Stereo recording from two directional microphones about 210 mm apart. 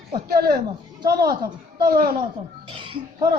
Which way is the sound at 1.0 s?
20° right (ahead or behind).